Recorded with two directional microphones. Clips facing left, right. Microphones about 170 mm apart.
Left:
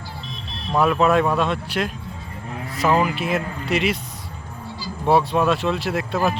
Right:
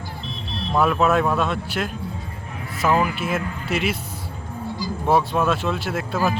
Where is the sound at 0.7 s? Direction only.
Centre (ahead or behind).